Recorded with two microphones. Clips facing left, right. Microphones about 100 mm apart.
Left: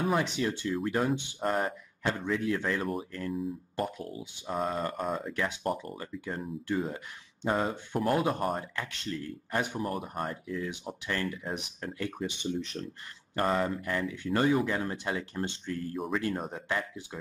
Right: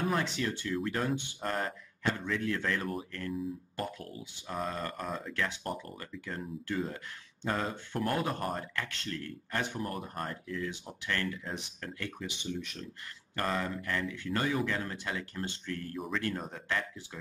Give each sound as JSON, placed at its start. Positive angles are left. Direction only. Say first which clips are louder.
{"t": 0.1, "sound": "speech", "louder": "left 3 dB", "side_deg": 20}
{"t": 12.2, "sound": "speech", "louder": "left 5 dB", "side_deg": 35}
{"t": 13.4, "sound": "speech", "louder": "left 5 dB", "side_deg": 20}